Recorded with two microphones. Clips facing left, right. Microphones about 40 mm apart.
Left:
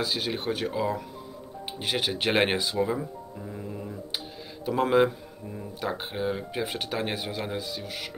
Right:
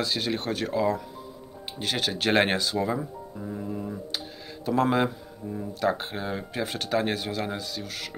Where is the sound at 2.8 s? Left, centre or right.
Centre.